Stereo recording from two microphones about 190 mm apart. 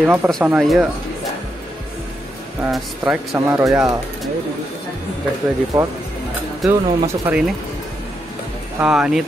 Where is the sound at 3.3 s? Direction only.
15° right (ahead or behind).